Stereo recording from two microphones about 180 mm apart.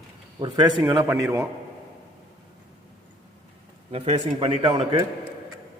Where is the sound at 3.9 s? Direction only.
35° right (ahead or behind).